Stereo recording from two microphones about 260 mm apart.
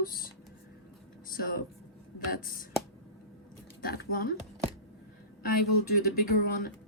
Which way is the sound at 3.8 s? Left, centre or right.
Left.